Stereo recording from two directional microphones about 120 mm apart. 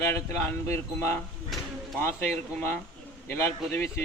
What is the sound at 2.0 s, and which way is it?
Speech, 20° left (ahead or behind).